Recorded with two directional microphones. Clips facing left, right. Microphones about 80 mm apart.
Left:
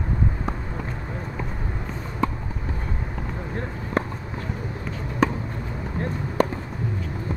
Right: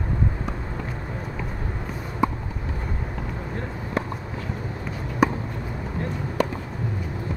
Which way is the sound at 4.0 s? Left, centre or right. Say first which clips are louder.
Left 2 dB; left.